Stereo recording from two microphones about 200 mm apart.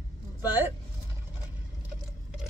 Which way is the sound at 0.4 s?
10° right (ahead or behind).